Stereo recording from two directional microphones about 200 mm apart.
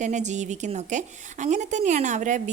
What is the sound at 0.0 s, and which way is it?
A woman's voice, 35° right (ahead or behind).